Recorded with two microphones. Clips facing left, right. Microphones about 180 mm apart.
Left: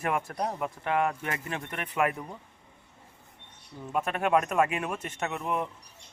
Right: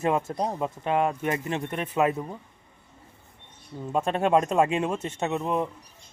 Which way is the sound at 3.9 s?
25° right (ahead or behind).